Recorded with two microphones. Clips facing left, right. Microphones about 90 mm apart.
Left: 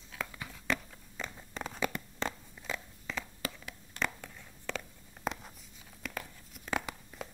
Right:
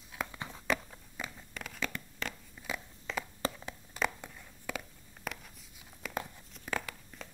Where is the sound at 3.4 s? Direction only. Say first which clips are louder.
Right 4 dB; 30° right (ahead or behind).